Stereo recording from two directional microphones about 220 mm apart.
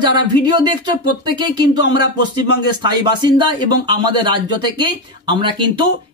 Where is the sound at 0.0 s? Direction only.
20° right (ahead or behind).